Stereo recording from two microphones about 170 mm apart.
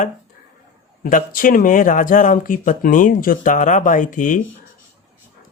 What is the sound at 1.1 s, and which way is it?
Speech, 55° left (ahead or behind).